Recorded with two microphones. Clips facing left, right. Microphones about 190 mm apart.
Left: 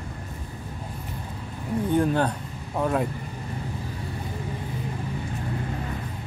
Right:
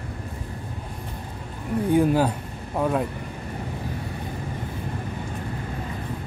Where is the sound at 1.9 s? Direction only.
5° right (ahead or behind).